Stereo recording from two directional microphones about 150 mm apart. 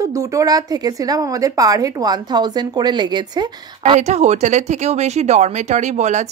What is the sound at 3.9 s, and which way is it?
Speech, 50° right (ahead or behind).